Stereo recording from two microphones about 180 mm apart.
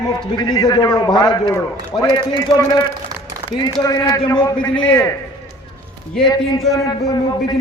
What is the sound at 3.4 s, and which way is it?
A man's voice, 25° left (ahead or behind).